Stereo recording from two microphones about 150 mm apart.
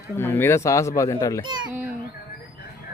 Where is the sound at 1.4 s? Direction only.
30° right (ahead or behind).